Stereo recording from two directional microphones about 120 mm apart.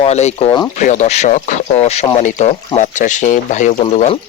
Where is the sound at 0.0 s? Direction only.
65° left (ahead or behind).